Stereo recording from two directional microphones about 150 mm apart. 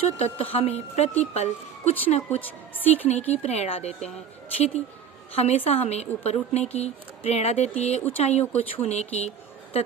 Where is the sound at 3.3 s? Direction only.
45° left (ahead or behind).